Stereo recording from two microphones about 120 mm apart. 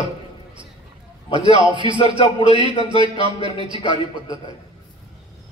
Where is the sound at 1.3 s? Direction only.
45° right (ahead or behind).